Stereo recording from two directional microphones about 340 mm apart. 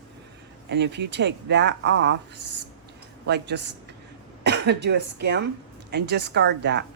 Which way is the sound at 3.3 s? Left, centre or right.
Right.